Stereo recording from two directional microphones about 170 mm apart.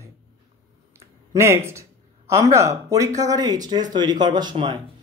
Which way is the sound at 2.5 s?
20° right (ahead or behind).